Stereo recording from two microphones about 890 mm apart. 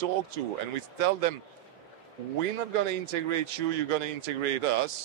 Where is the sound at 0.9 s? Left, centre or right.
Right.